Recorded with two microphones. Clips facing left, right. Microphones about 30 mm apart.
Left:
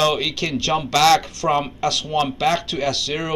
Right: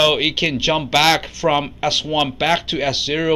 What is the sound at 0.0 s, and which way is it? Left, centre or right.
Speech, right.